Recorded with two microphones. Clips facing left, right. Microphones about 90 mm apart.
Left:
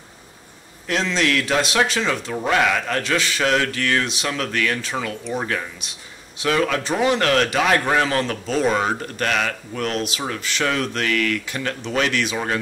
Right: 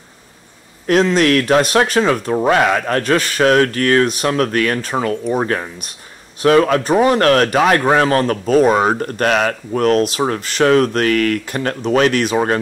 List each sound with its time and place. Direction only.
0.8 s speech: 50° right (ahead or behind)